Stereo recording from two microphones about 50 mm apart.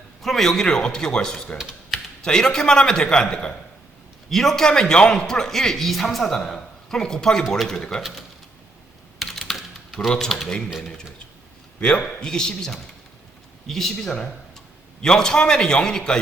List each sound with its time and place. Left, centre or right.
0.2 s a man's voice: centre
4.3 s a man's voice: centre
9.1 s typing: centre
10.1 s a man's voice: centre
11.8 s a man's voice: left